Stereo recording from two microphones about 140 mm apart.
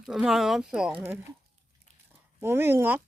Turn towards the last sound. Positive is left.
turn(degrees=-15)  # may be behind; listen again after turning